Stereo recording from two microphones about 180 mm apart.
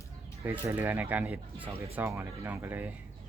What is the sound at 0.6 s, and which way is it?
Speech, 10° right (ahead or behind).